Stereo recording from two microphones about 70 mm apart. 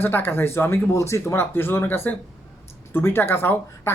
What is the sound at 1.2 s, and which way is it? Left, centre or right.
Speech, left.